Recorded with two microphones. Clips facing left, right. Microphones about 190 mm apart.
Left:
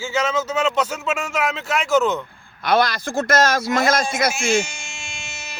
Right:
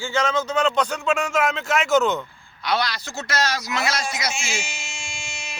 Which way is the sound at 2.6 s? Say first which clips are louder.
Left 6 dB; 50° left (ahead or behind).